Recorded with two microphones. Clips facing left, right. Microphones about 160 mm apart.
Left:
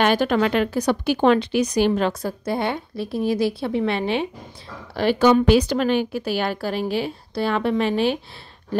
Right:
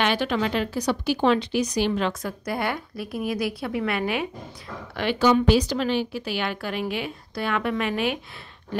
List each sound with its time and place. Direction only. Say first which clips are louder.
0.0 s a woman's voice: left 5 dB; 45° left (ahead or behind)
0.4 s speech: left 5 dB; 60° left (ahead or behind); by 2.3 s 40° left (ahead or behind)
2.4 s a woman's voice: left 3 dB; 25° left (ahead or behind)
5.2 s a woman's voice: left 3 dB; 60° left (ahead or behind); by 8.2 s 30° left (ahead or behind)